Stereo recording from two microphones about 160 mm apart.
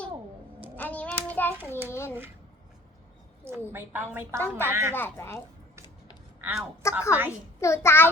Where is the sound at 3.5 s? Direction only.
15° right (ahead or behind).